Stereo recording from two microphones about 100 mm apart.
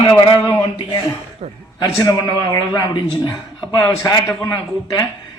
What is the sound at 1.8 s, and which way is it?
A man's voice, 40° left (ahead or behind).